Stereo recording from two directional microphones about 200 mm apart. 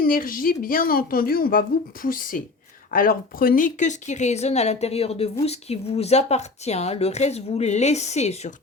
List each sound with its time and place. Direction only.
0.0 s a woman's voice: 45° left (ahead or behind)